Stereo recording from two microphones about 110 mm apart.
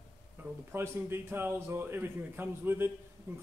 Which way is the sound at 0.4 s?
20° right (ahead or behind).